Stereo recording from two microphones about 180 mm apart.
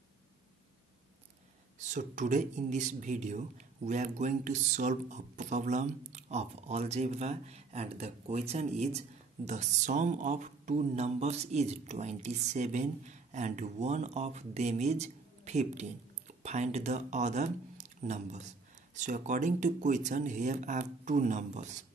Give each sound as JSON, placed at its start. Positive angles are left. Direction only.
{"t": 1.9, "sound": "speech", "side_deg": -45}